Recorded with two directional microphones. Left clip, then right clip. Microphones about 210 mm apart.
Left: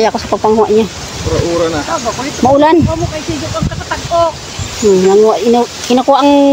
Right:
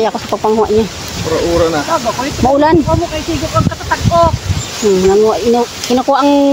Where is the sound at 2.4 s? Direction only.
15° left (ahead or behind).